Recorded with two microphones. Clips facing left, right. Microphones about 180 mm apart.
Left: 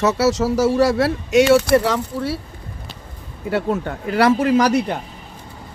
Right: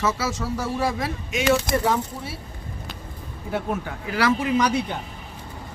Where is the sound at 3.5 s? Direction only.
80° left.